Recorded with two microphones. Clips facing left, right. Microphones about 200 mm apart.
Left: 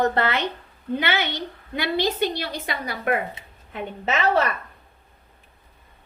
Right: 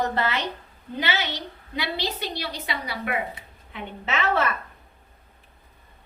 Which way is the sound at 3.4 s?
25° left (ahead or behind).